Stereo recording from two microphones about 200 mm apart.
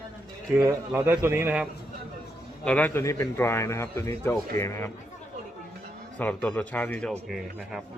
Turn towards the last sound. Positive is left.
turn(degrees=0)  # may be behind; listen again after turning